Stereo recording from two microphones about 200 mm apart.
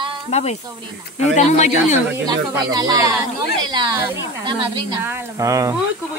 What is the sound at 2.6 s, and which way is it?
Speech, 20° right (ahead or behind).